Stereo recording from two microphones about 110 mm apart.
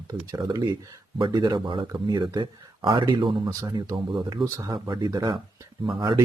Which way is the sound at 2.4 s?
45° right (ahead or behind).